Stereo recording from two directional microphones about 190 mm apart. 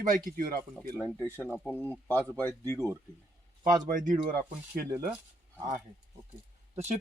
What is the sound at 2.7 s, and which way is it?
Speech, 15° right (ahead or behind).